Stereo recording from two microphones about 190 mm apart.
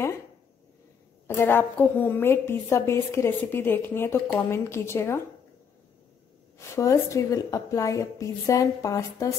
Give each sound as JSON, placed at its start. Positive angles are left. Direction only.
{"t": 1.2, "sound": "a woman's voice", "side_deg": 15}
{"t": 6.7, "sound": "a woman's voice", "side_deg": 15}